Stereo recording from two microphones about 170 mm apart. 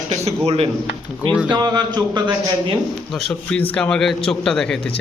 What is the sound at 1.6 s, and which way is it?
Speech, 25° right (ahead or behind).